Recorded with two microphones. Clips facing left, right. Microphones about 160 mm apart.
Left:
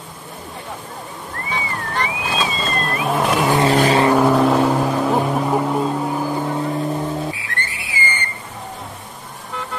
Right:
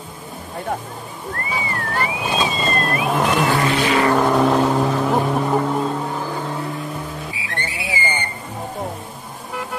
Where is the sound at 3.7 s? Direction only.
40° left (ahead or behind).